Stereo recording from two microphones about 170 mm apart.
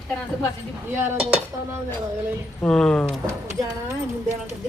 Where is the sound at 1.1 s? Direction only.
35° right (ahead or behind).